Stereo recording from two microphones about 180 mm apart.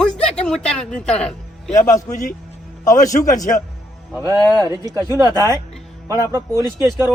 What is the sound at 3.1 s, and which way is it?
Speech, 45° left (ahead or behind).